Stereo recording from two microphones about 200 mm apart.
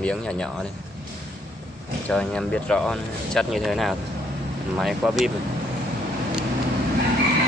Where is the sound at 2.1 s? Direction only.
5° left (ahead or behind).